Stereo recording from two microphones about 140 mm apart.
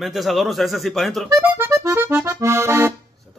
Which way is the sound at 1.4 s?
15° right (ahead or behind).